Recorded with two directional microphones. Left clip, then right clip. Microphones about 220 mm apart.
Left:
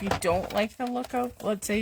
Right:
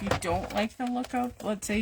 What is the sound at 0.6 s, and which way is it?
Speech, 40° left (ahead or behind).